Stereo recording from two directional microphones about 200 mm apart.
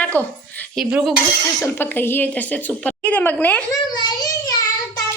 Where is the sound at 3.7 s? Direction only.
20° left (ahead or behind).